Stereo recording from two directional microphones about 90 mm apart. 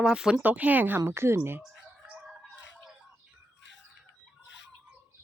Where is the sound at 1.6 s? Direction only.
5° right (ahead or behind).